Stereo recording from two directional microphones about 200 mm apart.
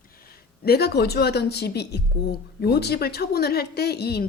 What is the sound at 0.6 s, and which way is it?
A woman's voice, 55° left (ahead or behind).